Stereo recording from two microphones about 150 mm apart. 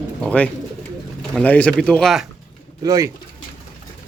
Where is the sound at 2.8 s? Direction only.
25° right (ahead or behind).